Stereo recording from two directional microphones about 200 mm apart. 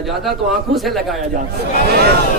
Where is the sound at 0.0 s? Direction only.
Centre (ahead or behind).